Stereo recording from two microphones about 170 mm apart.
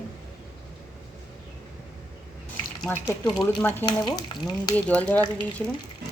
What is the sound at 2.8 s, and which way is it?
A woman's voice, 5° left (ahead or behind).